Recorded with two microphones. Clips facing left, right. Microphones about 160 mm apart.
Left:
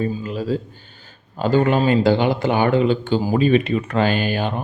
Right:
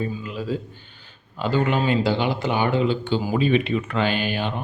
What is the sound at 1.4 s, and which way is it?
Speech, 45° left (ahead or behind).